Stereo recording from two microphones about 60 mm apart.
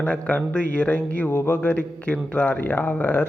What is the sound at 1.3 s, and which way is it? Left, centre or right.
Speech, left.